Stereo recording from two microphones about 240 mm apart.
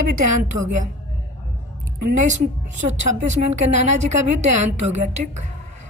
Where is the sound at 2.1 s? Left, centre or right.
Right.